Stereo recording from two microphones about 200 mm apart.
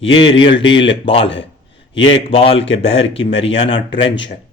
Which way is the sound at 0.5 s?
65° left (ahead or behind).